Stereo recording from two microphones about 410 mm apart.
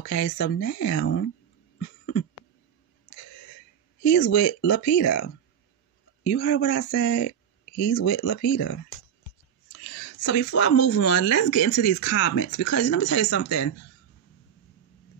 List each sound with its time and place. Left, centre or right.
0.0 s speech: left
3.1 s throat clearing: left
4.0 s speech: left